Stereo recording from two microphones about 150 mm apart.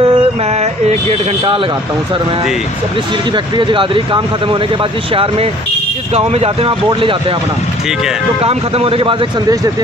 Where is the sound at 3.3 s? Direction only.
30° right (ahead or behind).